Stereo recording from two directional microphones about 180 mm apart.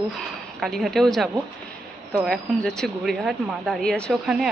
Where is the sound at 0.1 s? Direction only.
Centre (ahead or behind).